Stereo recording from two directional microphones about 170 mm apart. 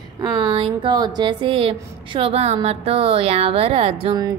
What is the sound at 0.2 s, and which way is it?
A woman's voice, 25° right (ahead or behind).